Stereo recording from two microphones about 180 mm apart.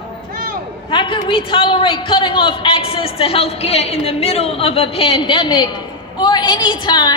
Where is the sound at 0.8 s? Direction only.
30° left (ahead or behind).